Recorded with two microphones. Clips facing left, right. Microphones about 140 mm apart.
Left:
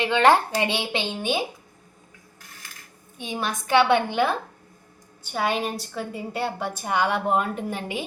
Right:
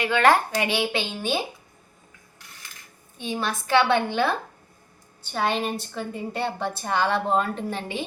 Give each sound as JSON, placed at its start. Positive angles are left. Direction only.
{"t": 0.0, "sound": "speech", "side_deg": 25}
{"t": 3.2, "sound": "a woman's voice", "side_deg": 15}